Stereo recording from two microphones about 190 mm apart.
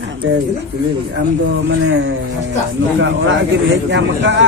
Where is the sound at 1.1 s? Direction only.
70° right (ahead or behind).